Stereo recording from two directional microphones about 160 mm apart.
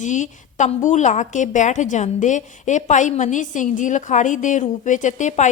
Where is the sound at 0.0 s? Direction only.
50° left (ahead or behind).